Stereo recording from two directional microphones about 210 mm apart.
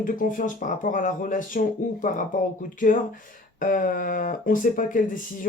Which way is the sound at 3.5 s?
40° left (ahead or behind).